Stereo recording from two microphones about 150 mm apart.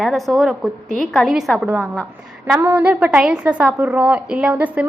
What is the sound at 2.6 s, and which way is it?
A woman's voice, 15° right (ahead or behind).